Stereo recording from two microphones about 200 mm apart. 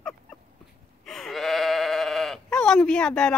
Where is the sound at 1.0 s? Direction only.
Centre (ahead or behind).